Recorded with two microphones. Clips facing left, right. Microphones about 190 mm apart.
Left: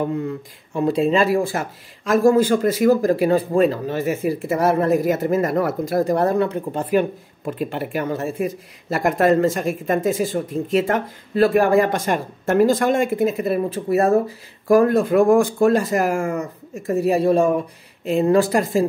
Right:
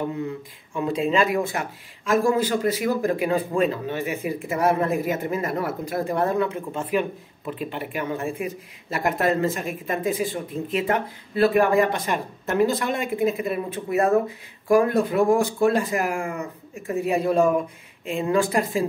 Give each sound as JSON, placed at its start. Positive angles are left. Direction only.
{"t": 0.7, "sound": "speech", "side_deg": 35}